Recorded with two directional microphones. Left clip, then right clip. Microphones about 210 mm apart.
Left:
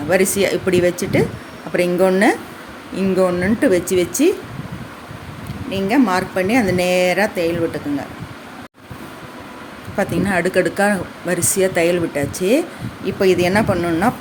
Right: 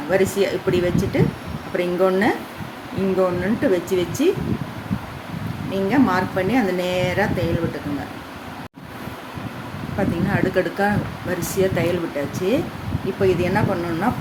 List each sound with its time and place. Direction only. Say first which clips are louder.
0.1 s speech: left 3 dB; 40° left (ahead or behind)
5.7 s speech: left 2 dB; 35° left (ahead or behind)
10.0 s speech: left 4 dB; 40° left (ahead or behind)